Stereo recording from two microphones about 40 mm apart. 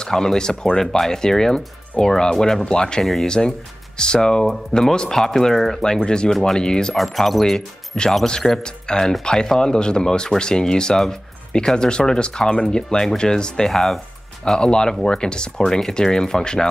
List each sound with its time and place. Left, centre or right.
0.0 s speech: centre
3.0 s speech: centre
3.3 s speech: centre
6.3 s speech: centre
6.6 s speech: centre
7.0 s speech: centre
7.5 s speech: centre
14.6 s speech: centre